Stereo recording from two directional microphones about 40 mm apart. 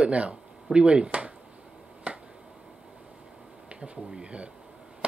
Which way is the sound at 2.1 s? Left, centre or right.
Right.